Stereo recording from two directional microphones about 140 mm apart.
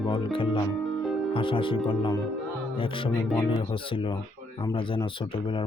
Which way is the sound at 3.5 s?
40° left (ahead or behind).